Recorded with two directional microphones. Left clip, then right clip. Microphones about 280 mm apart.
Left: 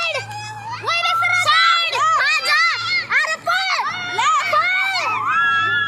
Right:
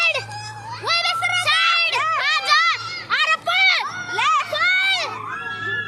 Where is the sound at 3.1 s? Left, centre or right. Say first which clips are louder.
Right 3 dB; right.